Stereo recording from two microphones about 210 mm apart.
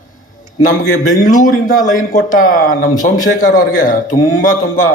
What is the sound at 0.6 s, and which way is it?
A man's voice, 40° left (ahead or behind).